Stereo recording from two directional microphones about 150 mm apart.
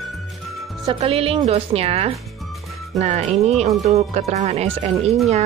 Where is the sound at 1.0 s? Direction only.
40° right (ahead or behind).